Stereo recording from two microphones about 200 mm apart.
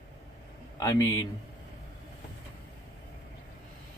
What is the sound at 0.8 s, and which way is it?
Speech, 15° left (ahead or behind).